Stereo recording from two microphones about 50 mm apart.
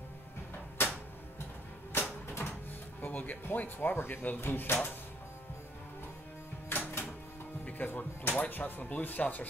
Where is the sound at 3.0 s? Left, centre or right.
Left.